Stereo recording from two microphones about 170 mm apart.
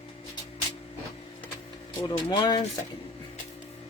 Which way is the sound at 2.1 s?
25° left (ahead or behind).